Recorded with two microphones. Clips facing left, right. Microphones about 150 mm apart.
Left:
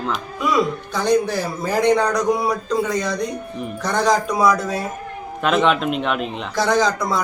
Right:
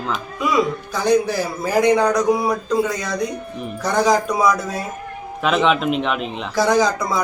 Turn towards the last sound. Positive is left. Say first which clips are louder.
# right 1 dB
turn(degrees=-5)  # may be behind; listen again after turning